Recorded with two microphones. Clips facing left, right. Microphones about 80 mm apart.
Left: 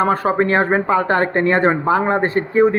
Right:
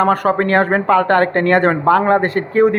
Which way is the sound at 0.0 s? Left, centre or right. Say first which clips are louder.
Right 2 dB; right.